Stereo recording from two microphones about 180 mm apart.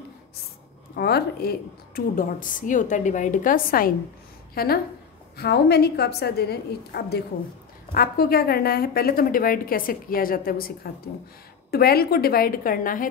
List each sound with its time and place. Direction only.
0.9 s a woman's voice: 60° left (ahead or behind)